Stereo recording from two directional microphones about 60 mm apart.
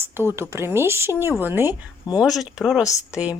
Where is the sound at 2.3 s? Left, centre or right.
Centre.